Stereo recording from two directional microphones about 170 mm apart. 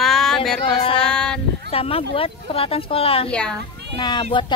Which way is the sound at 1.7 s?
35° left (ahead or behind).